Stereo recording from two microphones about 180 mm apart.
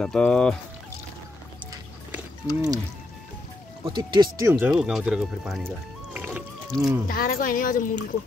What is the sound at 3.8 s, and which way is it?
Speech, 25° right (ahead or behind).